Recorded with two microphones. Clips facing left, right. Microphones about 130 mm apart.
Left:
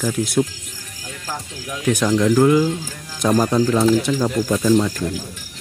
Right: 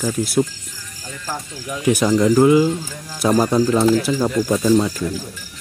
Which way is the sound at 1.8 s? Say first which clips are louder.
Right 2 dB; 10° right (ahead or behind).